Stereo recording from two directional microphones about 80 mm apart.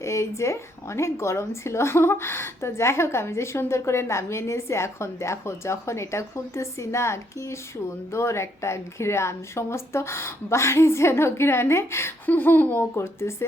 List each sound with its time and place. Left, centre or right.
0.0 s speech: left